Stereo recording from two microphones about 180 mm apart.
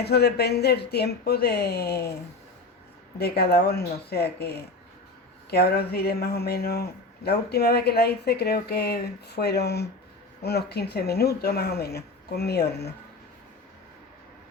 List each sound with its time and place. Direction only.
0.0 s speech: 60° left (ahead or behind)
3.2 s speech: 60° left (ahead or behind)